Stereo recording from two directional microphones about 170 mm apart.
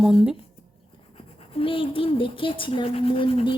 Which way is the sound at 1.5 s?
30° left (ahead or behind).